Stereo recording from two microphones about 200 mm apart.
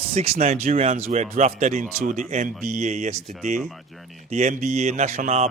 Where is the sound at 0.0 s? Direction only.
30° right (ahead or behind).